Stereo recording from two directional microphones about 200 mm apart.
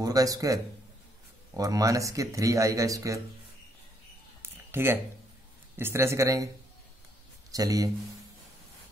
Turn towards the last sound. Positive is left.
turn(degrees=-20)  # may be behind; listen again after turning